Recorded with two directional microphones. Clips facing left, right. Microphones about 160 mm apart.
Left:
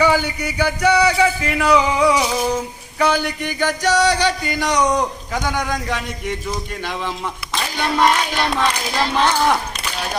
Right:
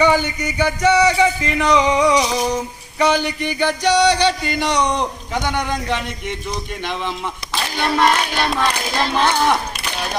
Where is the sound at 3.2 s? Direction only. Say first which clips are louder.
Right 1 dB; 15° right (ahead or behind).